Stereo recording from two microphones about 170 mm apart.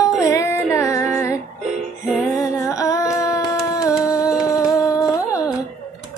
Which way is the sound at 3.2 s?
20° left (ahead or behind).